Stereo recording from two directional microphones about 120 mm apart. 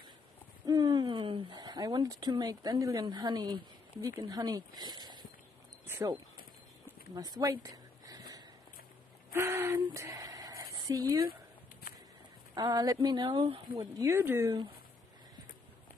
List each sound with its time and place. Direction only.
0.7 s owl: 30° right (ahead or behind)
4.0 s speech: 30° right (ahead or behind)
7.2 s speech: 35° right (ahead or behind)
7.5 s a sound: 30° right (ahead or behind)
9.3 s a sound: 20° right (ahead or behind)
12.5 s speech: 35° right (ahead or behind)